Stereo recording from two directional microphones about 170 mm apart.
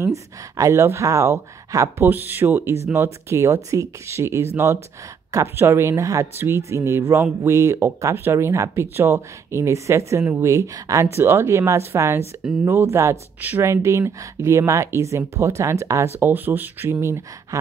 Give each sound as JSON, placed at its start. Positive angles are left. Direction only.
{"t": 0.0, "sound": "speech", "side_deg": -20}